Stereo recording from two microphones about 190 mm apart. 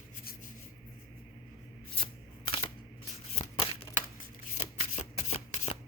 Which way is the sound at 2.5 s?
25° left (ahead or behind).